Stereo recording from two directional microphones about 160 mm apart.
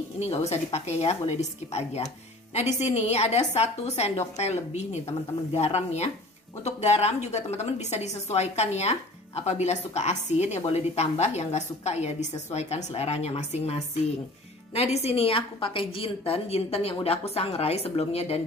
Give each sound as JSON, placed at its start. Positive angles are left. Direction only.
{"t": 0.2, "sound": "a woman's voice", "side_deg": 40}